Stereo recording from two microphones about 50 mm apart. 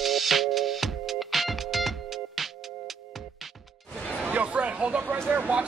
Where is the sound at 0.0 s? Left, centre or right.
Centre.